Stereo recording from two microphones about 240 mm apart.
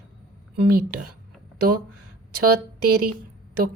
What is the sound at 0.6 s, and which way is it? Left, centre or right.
Speech, right.